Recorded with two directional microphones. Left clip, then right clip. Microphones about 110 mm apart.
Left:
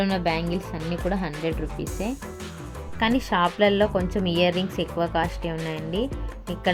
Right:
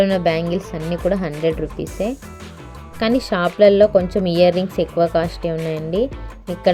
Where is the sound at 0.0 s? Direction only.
15° right (ahead or behind).